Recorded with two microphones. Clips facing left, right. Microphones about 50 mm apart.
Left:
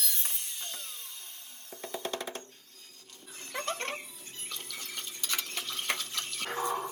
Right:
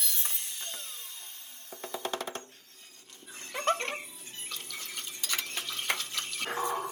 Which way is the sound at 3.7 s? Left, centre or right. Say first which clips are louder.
Right 2 dB; right.